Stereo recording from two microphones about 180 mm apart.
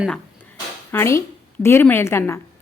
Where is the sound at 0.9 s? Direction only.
15° left (ahead or behind).